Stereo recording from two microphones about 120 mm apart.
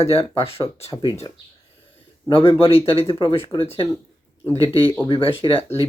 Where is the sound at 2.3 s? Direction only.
50° left (ahead or behind).